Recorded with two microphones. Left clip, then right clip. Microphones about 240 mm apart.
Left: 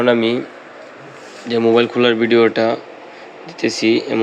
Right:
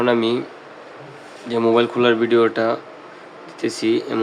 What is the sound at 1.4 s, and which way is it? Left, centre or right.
Speech, centre.